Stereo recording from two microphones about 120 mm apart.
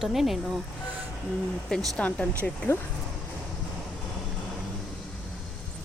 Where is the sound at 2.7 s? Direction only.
20° left (ahead or behind).